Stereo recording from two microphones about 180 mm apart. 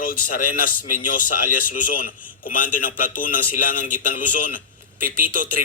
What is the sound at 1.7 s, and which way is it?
A man's voice, 50° left (ahead or behind).